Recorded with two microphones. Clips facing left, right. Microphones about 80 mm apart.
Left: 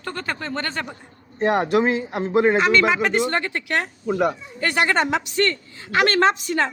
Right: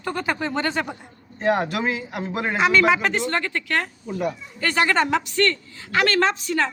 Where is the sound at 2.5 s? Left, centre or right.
Centre.